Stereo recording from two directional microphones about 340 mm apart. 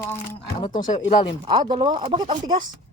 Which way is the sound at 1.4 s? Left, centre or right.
Centre.